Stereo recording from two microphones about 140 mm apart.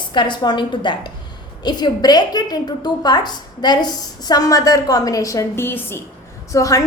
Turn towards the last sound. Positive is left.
turn(degrees=25)  # may be behind; listen again after turning